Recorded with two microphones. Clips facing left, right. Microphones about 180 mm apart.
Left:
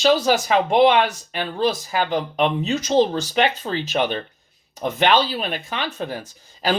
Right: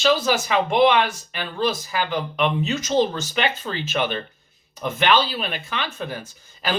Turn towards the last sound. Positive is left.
turn(degrees=35)  # may be behind; listen again after turning